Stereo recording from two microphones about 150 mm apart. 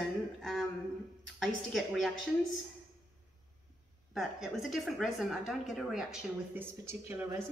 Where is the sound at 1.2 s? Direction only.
Centre (ahead or behind).